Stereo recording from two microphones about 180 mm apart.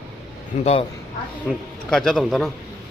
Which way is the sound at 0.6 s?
35° left (ahead or behind).